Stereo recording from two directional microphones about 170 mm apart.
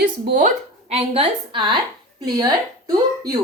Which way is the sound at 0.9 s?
30° right (ahead or behind).